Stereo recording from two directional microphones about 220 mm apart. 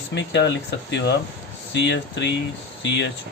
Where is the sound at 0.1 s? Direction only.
50° left (ahead or behind).